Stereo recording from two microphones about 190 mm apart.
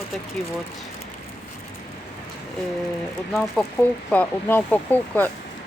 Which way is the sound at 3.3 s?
5° left (ahead or behind).